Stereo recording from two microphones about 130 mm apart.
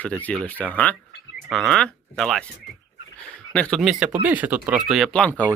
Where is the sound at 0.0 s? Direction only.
10° left (ahead or behind).